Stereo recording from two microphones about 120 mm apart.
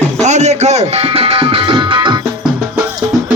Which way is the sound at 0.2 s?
70° right (ahead or behind).